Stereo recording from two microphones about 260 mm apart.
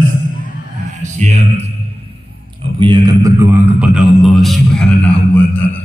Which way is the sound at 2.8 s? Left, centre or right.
Centre.